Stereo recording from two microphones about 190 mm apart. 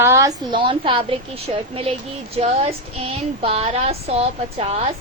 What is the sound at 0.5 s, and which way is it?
Speech, 25° right (ahead or behind).